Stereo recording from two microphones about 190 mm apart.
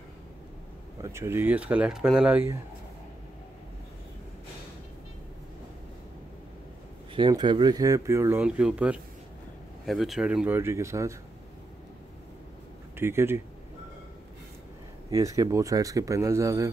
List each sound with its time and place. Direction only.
1.0 s speech: 15° right (ahead or behind)
7.2 s speech: 20° right (ahead or behind)
12.9 s speech: 15° right (ahead or behind)
15.0 s speech: 15° right (ahead or behind)